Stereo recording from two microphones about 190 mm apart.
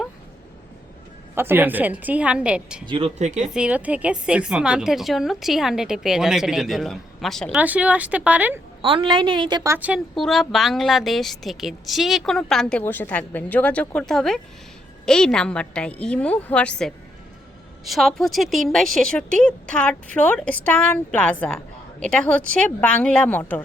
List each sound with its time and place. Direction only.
1.4 s a woman's voice: 10° right (ahead or behind)
2.8 s speech: 25° right (ahead or behind)
3.4 s a woman's voice: 5° right (ahead or behind)
8.8 s a woman's voice: 25° right (ahead or behind)
9.7 s speech: 5° right (ahead or behind); by 23.6 s 10° left (ahead or behind)